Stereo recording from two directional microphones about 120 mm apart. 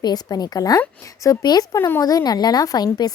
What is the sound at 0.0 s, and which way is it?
Speech, 35° left (ahead or behind).